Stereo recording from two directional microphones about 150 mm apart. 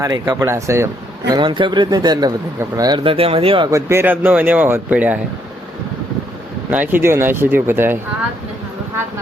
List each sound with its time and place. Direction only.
0.0 s speech: 25° right (ahead or behind)
1.3 s speech: 30° right (ahead or behind)
3.7 s a man's voice: 20° right (ahead or behind)
6.7 s a man's voice: 10° right (ahead or behind)